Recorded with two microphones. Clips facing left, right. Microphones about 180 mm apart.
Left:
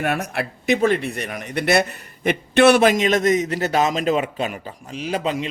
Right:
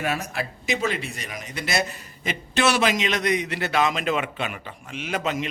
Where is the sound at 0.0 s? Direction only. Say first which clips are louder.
Left 4 dB; 60° left (ahead or behind).